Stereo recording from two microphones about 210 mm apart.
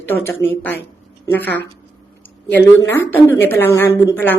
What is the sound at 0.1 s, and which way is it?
A woman's voice, 10° left (ahead or behind).